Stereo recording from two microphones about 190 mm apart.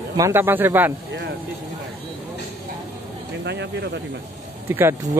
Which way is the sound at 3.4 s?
65° right (ahead or behind).